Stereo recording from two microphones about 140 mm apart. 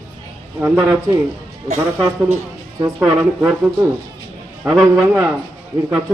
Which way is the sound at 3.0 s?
5° right (ahead or behind).